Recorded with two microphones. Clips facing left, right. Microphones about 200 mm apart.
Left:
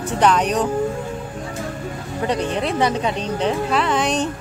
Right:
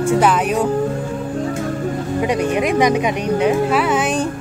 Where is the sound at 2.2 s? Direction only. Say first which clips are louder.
Right 3 dB; 10° right (ahead or behind).